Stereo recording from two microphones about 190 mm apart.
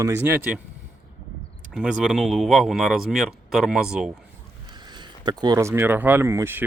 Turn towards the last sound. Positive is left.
turn(degrees=-15)  # may be behind; listen again after turning